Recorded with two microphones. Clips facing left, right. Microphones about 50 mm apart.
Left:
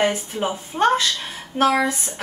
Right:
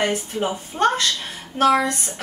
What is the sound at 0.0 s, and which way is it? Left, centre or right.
A woman's voice, centre.